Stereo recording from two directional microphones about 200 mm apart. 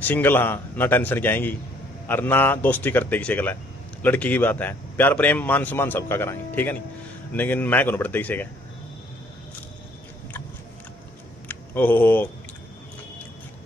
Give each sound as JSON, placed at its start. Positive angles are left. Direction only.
{"t": 0.0, "sound": "a man's voice", "side_deg": 10}
{"t": 11.4, "sound": "speech", "side_deg": 10}